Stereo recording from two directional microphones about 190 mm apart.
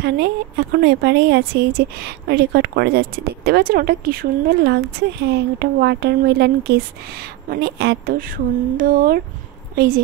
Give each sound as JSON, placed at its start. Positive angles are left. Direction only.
{"t": 0.0, "sound": "a woman's voice", "side_deg": -60}